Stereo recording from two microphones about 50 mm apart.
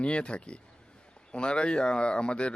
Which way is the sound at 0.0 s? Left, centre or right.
Left.